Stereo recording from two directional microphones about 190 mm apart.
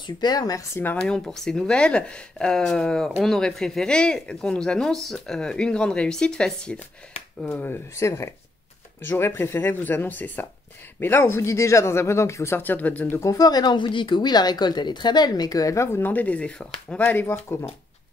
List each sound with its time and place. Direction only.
0.0 s speech: 20° left (ahead or behind)
1.0 s speech: 5° left (ahead or behind)